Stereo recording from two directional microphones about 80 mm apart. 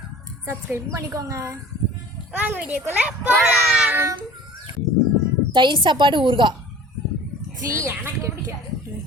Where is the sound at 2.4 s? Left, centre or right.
Centre.